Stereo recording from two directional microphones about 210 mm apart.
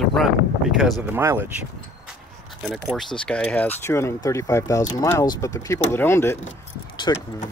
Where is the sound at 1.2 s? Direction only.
15° right (ahead or behind).